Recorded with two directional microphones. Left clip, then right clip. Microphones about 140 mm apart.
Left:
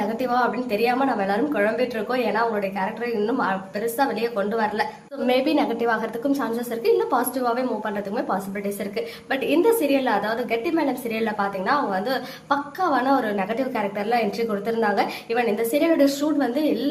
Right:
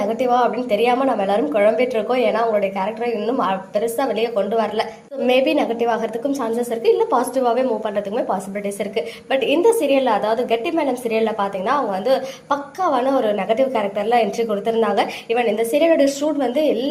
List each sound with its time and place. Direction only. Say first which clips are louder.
0.2 s a woman's voice: right 5 dB; 10° right (ahead or behind)
9.0 s a woman's voice: right 7 dB; 10° right (ahead or behind)